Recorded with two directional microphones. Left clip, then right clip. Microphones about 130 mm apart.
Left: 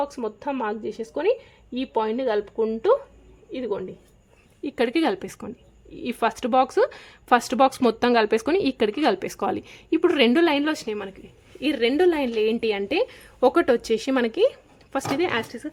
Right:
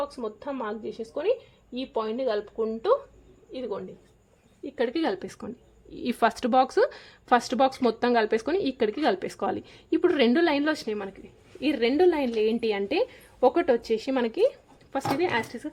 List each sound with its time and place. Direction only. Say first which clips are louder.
0.2 s a woman's voice: left 5 dB; 55° left (ahead or behind); by 5.2 s 35° left (ahead or behind)
5.2 s speech: left 2 dB; 20° left (ahead or behind)
5.9 s speech: even; centre (ahead or behind); by 15.7 s 15° left (ahead or behind)